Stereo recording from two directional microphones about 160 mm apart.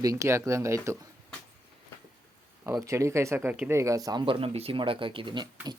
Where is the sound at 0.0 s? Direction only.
20° right (ahead or behind).